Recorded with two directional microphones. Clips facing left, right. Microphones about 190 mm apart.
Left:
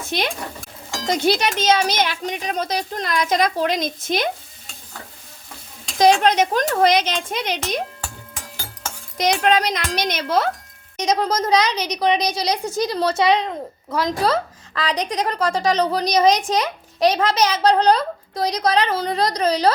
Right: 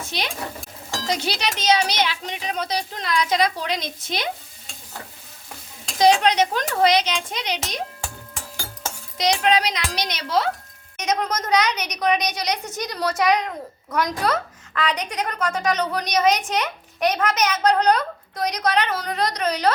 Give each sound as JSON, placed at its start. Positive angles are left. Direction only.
{"t": 1.0, "sound": "speech", "side_deg": 50}
{"t": 6.0, "sound": "speech", "side_deg": 50}
{"t": 9.1, "sound": "speech", "side_deg": 50}
{"t": 10.9, "sound": "a woman's voice", "side_deg": 30}